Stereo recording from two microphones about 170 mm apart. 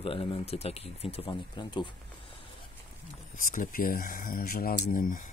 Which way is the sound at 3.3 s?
55° left (ahead or behind).